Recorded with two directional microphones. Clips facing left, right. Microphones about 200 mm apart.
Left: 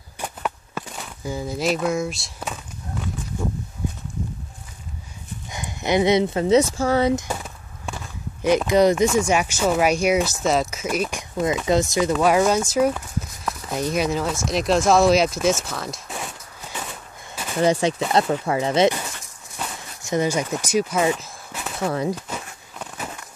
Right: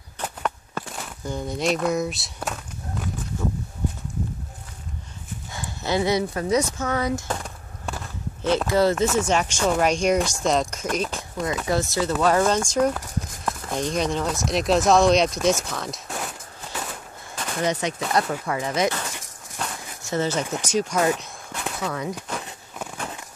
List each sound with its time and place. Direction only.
0.2 s a sound: 5° left (ahead or behind)
5.5 s speech: 15° left (ahead or behind)
7.2 s chop: 5° left (ahead or behind)
8.4 s speech: 15° left (ahead or behind)
17.6 s speech: 30° left (ahead or behind)
19.6 s a sound: 5° left (ahead or behind)
20.1 s speech: 15° left (ahead or behind)
21.8 s speech: 30° left (ahead or behind)